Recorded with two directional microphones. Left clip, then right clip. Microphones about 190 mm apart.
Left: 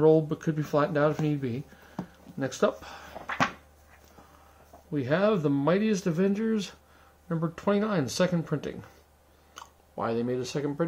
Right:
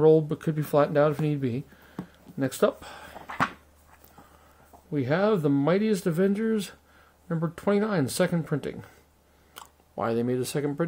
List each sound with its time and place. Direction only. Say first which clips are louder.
0.0 s speech: right 2 dB; 45° right (ahead or behind)
4.9 s speech: right 1 dB; 45° right (ahead or behind)